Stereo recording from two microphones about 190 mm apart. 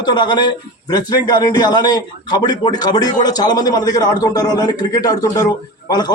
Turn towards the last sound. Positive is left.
turn(degrees=20)  # may be behind; listen again after turning